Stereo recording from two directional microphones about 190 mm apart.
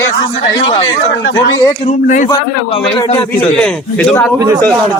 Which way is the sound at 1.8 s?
40° left (ahead or behind).